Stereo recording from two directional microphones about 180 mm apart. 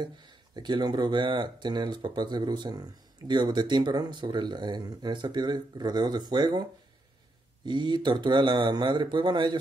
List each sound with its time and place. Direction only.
0.0 s speech: 25° right (ahead or behind)
7.6 s speech: 25° right (ahead or behind)